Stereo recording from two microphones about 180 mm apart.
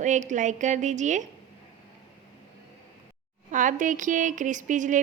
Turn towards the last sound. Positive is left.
turn(degrees=-45)  # may be behind; listen again after turning